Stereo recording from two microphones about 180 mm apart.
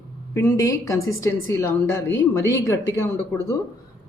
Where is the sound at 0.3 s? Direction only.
15° left (ahead or behind).